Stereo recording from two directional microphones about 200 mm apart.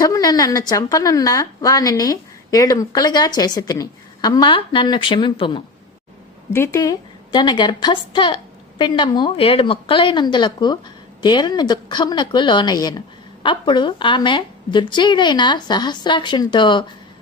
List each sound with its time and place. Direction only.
0.0 s a woman's voice: 20° left (ahead or behind)